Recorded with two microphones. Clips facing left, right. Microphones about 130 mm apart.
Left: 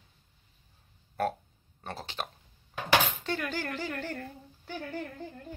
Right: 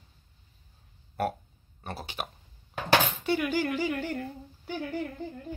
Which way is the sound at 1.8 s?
10° right (ahead or behind).